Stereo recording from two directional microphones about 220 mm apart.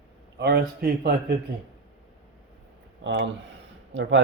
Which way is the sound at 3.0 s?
55° right (ahead or behind).